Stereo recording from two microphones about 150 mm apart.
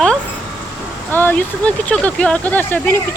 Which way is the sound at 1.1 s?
15° left (ahead or behind).